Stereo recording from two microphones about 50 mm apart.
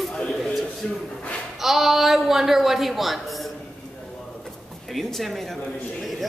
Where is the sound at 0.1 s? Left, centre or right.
Centre.